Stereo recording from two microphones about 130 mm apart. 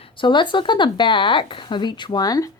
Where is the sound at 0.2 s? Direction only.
40° left (ahead or behind).